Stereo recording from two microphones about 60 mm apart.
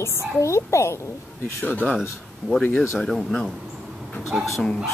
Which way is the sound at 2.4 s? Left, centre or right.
Right.